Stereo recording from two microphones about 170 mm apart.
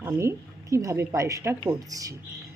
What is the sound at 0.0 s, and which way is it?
A woman's voice, 15° right (ahead or behind).